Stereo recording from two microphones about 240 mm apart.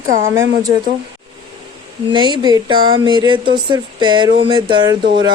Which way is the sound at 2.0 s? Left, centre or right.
Centre.